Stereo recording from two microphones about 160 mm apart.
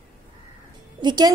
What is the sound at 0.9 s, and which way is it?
Speech, 25° right (ahead or behind).